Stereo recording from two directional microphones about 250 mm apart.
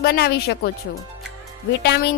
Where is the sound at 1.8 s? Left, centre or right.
Left.